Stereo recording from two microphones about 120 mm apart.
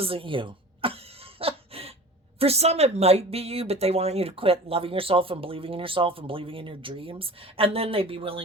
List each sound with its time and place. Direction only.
0.0 s cough: 50° right (ahead or behind)
2.4 s a woman's voice: 60° right (ahead or behind)